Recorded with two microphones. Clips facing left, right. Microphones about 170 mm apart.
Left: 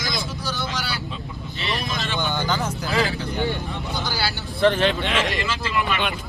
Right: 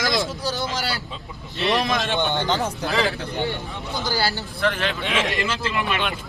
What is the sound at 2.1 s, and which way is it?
Speech, 20° right (ahead or behind).